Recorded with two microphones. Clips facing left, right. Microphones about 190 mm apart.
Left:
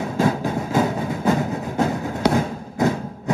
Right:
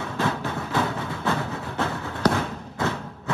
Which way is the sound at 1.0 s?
20° left (ahead or behind).